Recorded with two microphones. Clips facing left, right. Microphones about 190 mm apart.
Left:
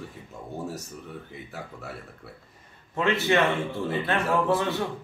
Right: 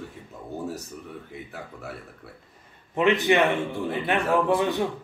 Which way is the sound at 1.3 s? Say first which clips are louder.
Right 1 dB; centre (ahead or behind).